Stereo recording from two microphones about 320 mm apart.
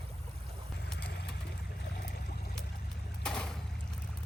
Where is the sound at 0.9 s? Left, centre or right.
Left.